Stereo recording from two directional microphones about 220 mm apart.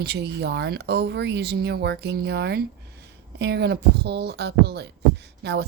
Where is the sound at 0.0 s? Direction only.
50° right (ahead or behind).